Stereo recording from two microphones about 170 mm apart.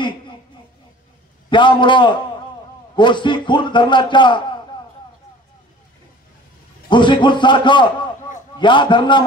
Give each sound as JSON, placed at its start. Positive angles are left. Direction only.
{"t": 1.5, "sound": "a man's voice", "side_deg": 30}
{"t": 6.9, "sound": "a man's voice", "side_deg": 30}